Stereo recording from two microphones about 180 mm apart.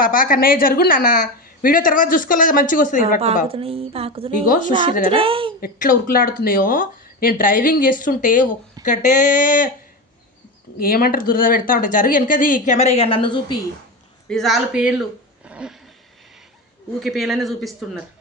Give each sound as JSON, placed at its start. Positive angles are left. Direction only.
{"t": 0.0, "sound": "a woman's voice", "side_deg": 50}
{"t": 3.5, "sound": "a woman's voice", "side_deg": -30}
{"t": 4.4, "sound": "a woman's voice", "side_deg": 50}
{"t": 4.7, "sound": "a woman's voice", "side_deg": -25}
{"t": 5.5, "sound": "a woman's voice", "side_deg": 50}
{"t": 10.8, "sound": "a woman's voice", "side_deg": 55}
{"t": 14.3, "sound": "a man's voice", "side_deg": 0}
{"t": 15.4, "sound": "a sound", "side_deg": -5}
{"t": 17.0, "sound": "a man's voice", "side_deg": 0}